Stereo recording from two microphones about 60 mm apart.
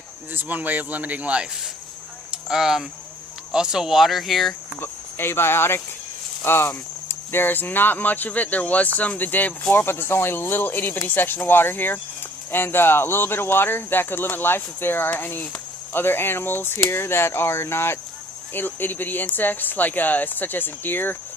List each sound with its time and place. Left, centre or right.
0.3 s speech: right
2.3 s speech: centre
4.8 s speech: left